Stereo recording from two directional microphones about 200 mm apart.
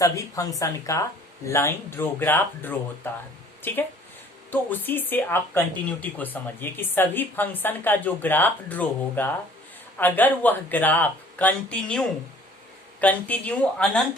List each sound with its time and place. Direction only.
0.0 s speech: 15° left (ahead or behind)